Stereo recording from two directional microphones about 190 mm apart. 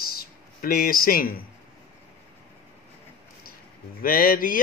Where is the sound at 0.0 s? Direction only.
50° left (ahead or behind).